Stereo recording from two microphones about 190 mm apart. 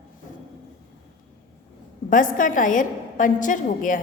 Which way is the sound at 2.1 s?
45° left (ahead or behind).